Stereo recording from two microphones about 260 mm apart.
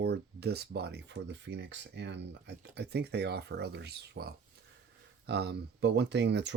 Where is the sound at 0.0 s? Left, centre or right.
Right.